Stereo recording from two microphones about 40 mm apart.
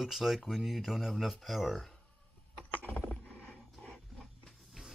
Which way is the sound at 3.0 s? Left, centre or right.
Left.